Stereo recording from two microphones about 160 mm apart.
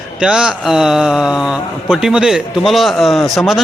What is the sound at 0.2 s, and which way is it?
A man's voice, 5° right (ahead or behind).